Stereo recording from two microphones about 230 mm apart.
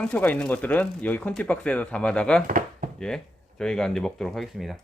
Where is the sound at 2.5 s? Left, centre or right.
Right.